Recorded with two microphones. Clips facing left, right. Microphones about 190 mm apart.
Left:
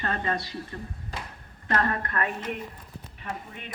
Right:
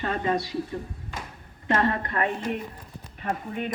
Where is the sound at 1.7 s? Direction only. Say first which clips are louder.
Right 2 dB; 25° right (ahead or behind).